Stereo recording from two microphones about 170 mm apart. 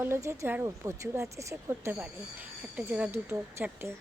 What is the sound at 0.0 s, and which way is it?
Speech, 15° right (ahead or behind).